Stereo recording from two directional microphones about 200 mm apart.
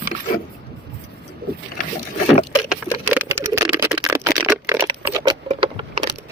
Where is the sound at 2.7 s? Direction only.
10° right (ahead or behind); by 6.1 s 25° right (ahead or behind).